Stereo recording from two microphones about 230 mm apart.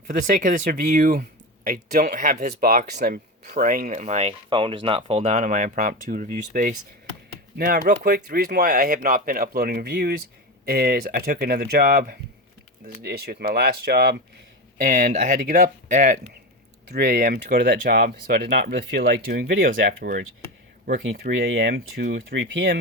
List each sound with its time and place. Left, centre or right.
0.1 s speech: right
16.9 s speech: right